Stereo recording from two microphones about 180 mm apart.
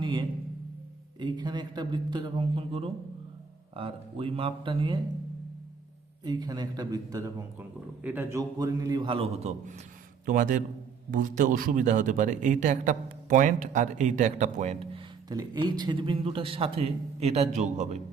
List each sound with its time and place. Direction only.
0.0 s a sound: 25° right (ahead or behind)
1.2 s a man's voice: 25° right (ahead or behind)
6.2 s a man's voice: 20° right (ahead or behind); by 18.0 s 40° right (ahead or behind)